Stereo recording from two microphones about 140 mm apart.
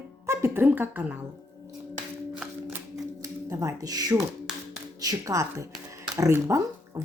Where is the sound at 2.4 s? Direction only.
10° right (ahead or behind).